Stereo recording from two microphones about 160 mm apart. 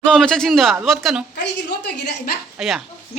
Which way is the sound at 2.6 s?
Centre (ahead or behind).